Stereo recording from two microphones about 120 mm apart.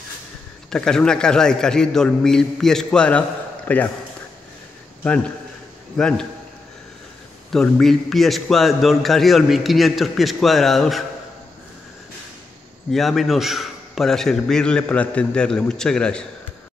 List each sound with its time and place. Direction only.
0.7 s a man's voice: 5° left (ahead or behind)
5.9 s a man's voice: 5° left (ahead or behind)
7.5 s a man's voice: 5° left (ahead or behind)
12.9 s a man's voice: centre (ahead or behind)